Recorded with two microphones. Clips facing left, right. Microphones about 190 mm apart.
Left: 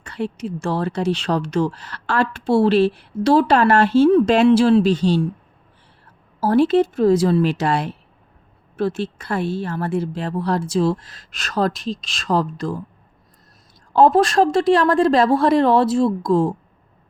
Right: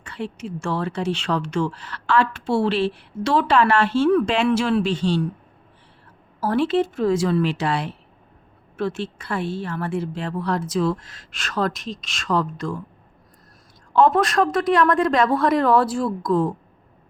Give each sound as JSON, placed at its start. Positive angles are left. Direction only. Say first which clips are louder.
{"t": 0.0, "sound": "speech", "louder": "left 4 dB", "side_deg": 40}
{"t": 4.4, "sound": "speech", "louder": "left 6 dB", "side_deg": 30}
{"t": 6.4, "sound": "speech", "louder": "left 5 dB", "side_deg": 40}
{"t": 13.9, "sound": "a woman's voice", "louder": "left 3 dB", "side_deg": 35}